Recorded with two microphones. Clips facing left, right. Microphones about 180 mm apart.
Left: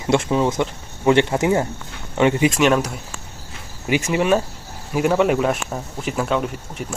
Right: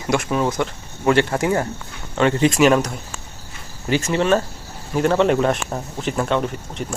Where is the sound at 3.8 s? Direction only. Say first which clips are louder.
Even; 15° left (ahead or behind).